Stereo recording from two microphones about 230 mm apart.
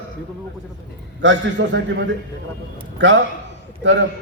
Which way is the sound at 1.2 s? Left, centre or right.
Right.